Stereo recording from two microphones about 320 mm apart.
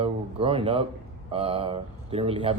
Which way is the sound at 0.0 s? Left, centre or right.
Centre.